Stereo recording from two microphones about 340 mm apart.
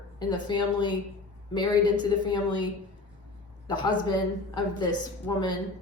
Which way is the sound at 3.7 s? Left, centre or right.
Centre.